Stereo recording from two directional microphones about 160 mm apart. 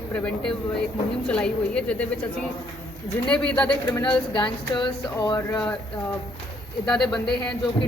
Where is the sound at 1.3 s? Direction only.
5° left (ahead or behind).